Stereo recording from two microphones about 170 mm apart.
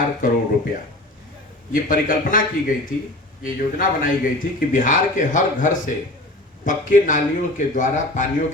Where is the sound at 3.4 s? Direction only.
55° left (ahead or behind).